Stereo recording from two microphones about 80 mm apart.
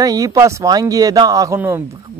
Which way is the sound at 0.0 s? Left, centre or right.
Right.